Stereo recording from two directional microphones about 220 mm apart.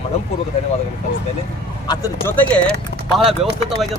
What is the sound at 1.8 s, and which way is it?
Speech, 15° left (ahead or behind).